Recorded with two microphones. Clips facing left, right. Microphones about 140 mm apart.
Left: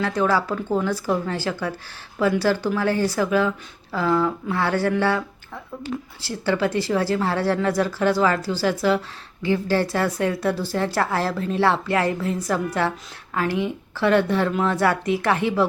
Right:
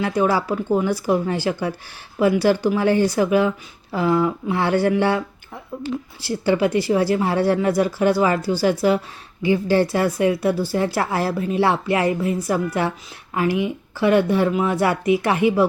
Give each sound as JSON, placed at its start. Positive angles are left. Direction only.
{"t": 0.0, "sound": "speech", "side_deg": -15}
{"t": 6.2, "sound": "speech", "side_deg": -15}